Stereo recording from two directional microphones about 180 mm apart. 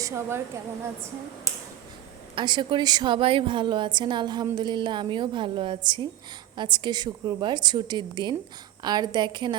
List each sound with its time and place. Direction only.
0.0 s a woman's voice: 15° right (ahead or behind)
2.3 s a woman's voice: 25° right (ahead or behind)